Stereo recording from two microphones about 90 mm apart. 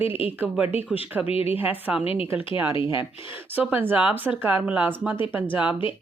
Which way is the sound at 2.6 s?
70° left (ahead or behind).